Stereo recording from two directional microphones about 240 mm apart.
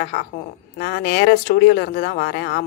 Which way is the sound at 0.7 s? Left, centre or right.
Left.